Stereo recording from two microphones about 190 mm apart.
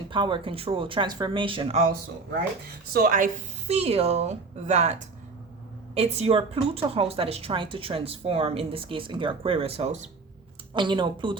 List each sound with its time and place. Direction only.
0.1 s speech: 25° right (ahead or behind)
2.9 s speech: 50° right (ahead or behind)
3.8 s a woman's voice: 30° right (ahead or behind)
10.8 s speech: 25° right (ahead or behind)